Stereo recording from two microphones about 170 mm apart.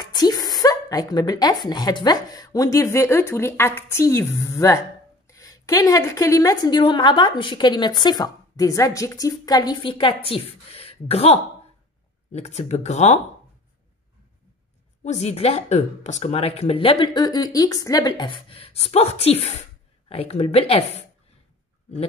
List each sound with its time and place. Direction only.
0.0 s a woman's voice: 25° left (ahead or behind); by 13.2 s 40° left (ahead or behind)
15.0 s speech: 40° left (ahead or behind)